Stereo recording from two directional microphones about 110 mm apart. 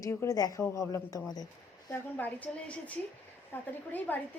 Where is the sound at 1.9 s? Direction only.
15° left (ahead or behind).